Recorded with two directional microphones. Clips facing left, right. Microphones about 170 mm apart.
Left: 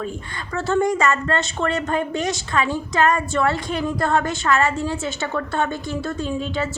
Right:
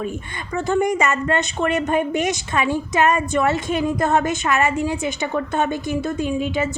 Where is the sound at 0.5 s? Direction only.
15° right (ahead or behind).